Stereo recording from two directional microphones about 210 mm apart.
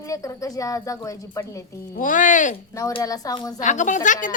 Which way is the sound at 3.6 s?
35° left (ahead or behind).